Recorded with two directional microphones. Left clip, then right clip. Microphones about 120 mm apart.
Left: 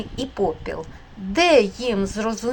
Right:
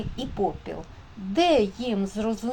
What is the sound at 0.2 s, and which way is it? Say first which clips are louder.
A woman's voice: left 4 dB; 15° left (ahead or behind).